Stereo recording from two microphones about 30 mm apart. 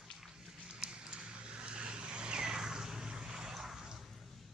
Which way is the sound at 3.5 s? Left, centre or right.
Centre.